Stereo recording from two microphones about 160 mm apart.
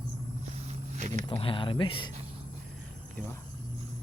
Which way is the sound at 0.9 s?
50° right (ahead or behind).